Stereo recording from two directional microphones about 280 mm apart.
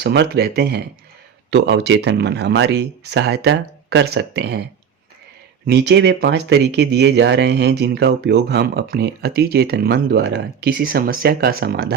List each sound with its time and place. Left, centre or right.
0.0 s speech: right
5.6 s speech: right